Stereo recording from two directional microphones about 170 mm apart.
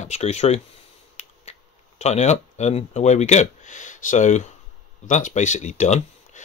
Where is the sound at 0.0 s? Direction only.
40° left (ahead or behind).